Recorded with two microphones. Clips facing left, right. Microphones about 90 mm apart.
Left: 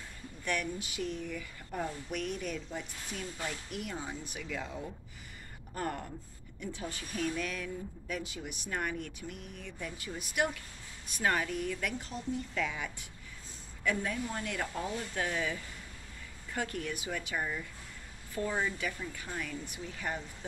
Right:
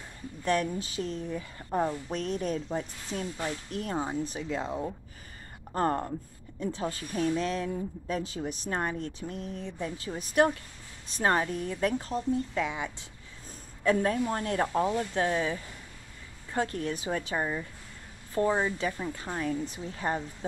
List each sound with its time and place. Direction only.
0.5 s speech: 35° right (ahead or behind)
5.8 s speech: 45° right (ahead or behind)
12.5 s speech: 25° right (ahead or behind)
13.8 s speech: 40° right (ahead or behind)